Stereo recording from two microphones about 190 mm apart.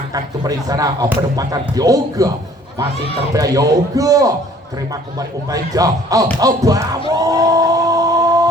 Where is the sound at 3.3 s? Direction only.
20° right (ahead or behind).